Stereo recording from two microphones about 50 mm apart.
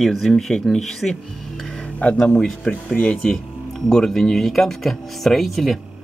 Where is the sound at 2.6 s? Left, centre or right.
Left.